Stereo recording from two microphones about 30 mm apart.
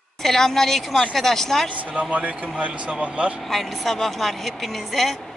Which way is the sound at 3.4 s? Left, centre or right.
Centre.